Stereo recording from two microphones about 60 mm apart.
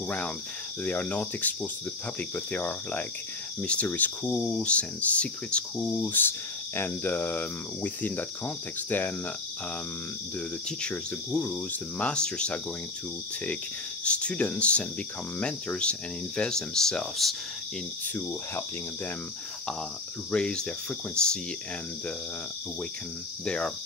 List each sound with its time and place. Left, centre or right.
0.8 s speech: left
4.4 s speech: centre
6.0 s cricket: left
10.8 s speech: centre
14.0 s speech: centre
20.2 s speech: centre
23.4 s speech: centre